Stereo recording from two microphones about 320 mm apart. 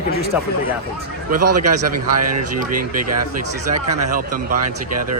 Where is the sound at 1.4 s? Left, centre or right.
Right.